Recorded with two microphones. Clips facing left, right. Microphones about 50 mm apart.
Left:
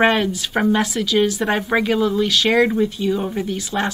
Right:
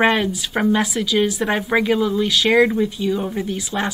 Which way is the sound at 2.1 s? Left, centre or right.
Centre.